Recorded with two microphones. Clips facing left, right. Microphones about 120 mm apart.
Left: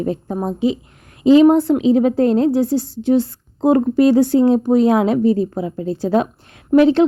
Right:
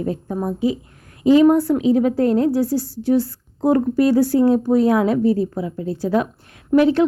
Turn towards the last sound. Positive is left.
turn(degrees=25)  # may be behind; listen again after turning